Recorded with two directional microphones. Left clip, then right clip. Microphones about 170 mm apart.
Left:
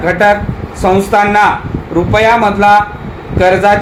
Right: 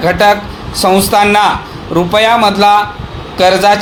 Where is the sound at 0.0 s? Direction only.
45° right (ahead or behind).